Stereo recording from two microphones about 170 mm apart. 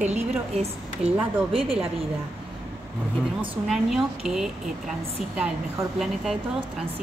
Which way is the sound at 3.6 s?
5° right (ahead or behind).